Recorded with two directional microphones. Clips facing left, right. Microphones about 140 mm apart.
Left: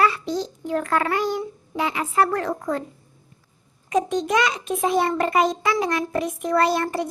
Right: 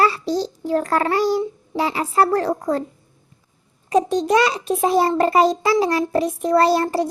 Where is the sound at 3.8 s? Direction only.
35° right (ahead or behind).